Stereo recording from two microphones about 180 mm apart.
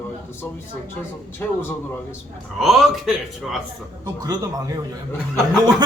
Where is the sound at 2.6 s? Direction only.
Centre (ahead or behind).